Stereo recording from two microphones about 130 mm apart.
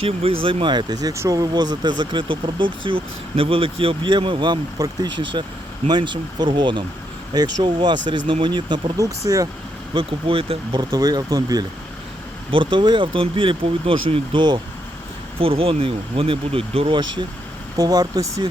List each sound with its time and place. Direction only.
0.0 s speech: 45° right (ahead or behind); by 9.5 s 25° right (ahead or behind)
9.9 s speech: 45° right (ahead or behind)
12.5 s speech: 40° right (ahead or behind)